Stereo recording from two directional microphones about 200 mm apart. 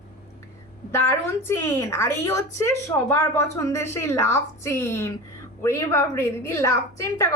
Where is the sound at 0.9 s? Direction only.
15° left (ahead or behind).